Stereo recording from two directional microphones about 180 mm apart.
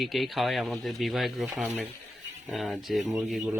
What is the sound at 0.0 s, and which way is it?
Speech, centre (ahead or behind).